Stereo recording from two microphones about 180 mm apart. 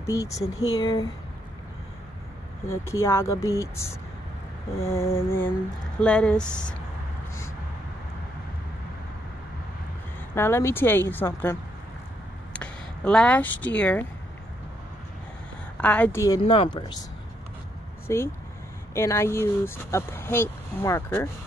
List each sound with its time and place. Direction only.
0.0 s speech: 15° left (ahead or behind)
2.6 s speech: 15° left (ahead or behind)
10.3 s speech: 15° left (ahead or behind)
12.5 s speech: 5° left (ahead or behind)
15.8 s speech: 10° left (ahead or behind)
16.4 s speech: 30° left (ahead or behind)
18.0 s speech: 15° left (ahead or behind)